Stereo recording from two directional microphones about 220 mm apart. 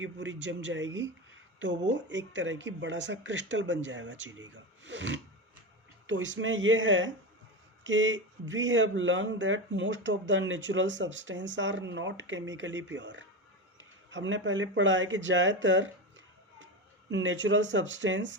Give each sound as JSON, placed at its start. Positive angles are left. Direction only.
{"t": 0.0, "sound": "speech", "side_deg": -55}